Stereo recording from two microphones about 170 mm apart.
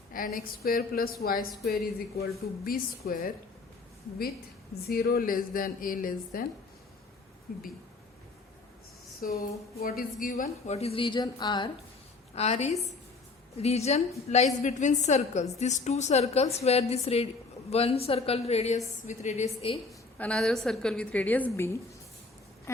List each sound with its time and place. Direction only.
0.3 s speech: 60° left (ahead or behind)
4.9 s speech: 65° left (ahead or behind)
9.2 s speech: 60° left (ahead or behind)
10.7 s speech: 35° left (ahead or behind)
12.3 s a woman's voice: 40° left (ahead or behind)
20.1 s a woman's voice: 5° left (ahead or behind)